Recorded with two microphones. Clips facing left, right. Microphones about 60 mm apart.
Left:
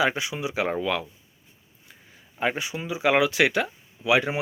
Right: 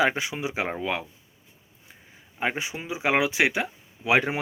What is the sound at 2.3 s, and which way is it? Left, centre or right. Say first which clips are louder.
Speech: left 2 dB; right.